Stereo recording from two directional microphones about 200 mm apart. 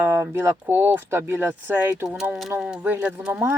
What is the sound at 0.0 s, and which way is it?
Speech, 10° right (ahead or behind).